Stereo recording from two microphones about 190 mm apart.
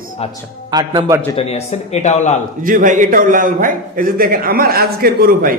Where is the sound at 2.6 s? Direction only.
45° right (ahead or behind).